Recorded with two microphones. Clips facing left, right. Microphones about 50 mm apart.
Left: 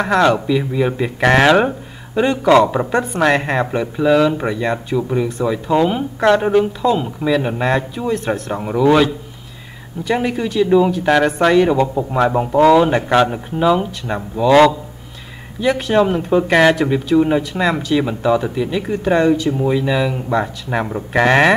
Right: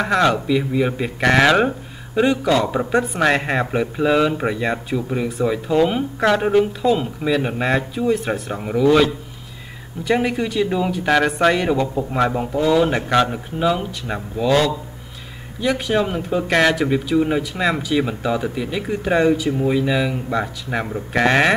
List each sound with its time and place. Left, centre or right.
0.0 s speech: centre
1.2 s speech: centre
2.9 s speech: centre
10.0 s speech: centre
11.8 s speech: centre
12.1 s speech: centre
15.6 s speech: centre